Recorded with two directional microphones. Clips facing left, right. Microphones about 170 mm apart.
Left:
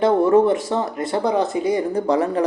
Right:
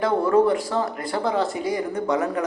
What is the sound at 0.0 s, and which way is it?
Speech, 25° left (ahead or behind).